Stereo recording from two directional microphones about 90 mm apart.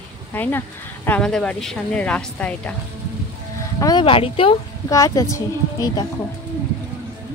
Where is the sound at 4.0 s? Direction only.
85° left.